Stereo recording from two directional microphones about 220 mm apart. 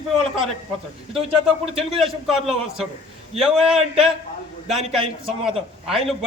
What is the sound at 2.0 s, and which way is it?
Speech, centre (ahead or behind).